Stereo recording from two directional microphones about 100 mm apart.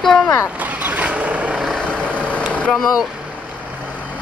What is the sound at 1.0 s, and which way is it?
Vehicle, 15° right (ahead or behind).